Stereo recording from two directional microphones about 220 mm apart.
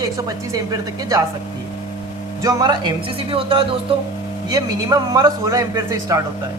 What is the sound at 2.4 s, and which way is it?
A man's voice, 20° right (ahead or behind).